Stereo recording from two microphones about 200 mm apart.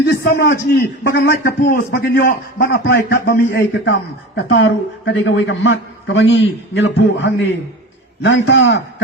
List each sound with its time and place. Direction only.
0.0 s a man's voice: 50° left (ahead or behind)
4.4 s a man's voice: 70° left (ahead or behind)
6.7 s a man's voice: 65° left (ahead or behind)